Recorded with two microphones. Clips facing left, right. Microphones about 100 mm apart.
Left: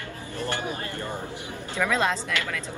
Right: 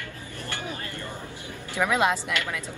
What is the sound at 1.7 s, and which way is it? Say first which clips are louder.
Speech: right 1 dB; 15° right (ahead or behind).